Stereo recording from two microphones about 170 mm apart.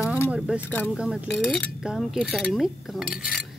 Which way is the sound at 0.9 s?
5° right (ahead or behind).